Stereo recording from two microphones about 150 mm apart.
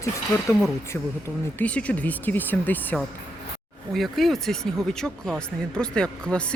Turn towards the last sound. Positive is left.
turn(degrees=5)  # may be behind; listen again after turning